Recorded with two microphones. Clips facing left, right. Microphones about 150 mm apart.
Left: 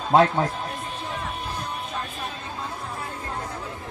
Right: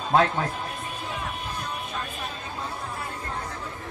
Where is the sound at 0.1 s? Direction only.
20° left (ahead or behind).